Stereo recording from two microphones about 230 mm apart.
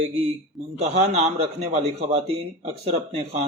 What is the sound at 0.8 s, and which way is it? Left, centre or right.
A man's voice, right.